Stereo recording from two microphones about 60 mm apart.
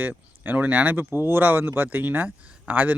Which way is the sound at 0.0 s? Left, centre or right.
Right.